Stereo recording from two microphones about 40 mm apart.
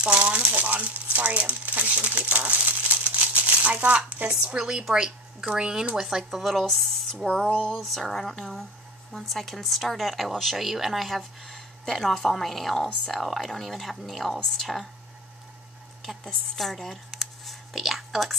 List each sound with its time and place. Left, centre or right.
0.0 s speech: right
0.5 s speech: right
4.6 s speech: centre
6.5 s speech: centre
7.2 s a sound: centre
7.8 s speech: centre
9.1 s speech: centre
16.3 s a woman's voice: centre